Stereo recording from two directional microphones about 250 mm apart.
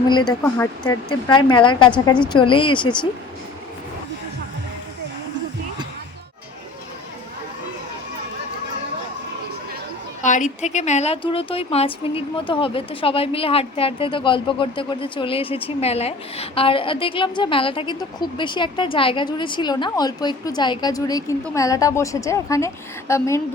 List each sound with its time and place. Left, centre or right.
0.1 s speech: centre
10.2 s speech: left; by 23.4 s centre